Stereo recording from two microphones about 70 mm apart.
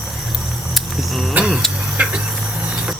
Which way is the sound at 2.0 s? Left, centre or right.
Right.